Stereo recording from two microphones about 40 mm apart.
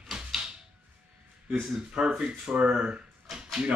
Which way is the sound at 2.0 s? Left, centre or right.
Centre.